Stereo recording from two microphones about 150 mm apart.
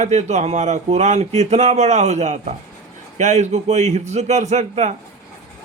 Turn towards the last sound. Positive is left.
turn(degrees=-50)  # may be behind; listen again after turning